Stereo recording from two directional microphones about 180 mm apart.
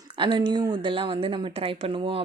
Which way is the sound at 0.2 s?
25° right (ahead or behind).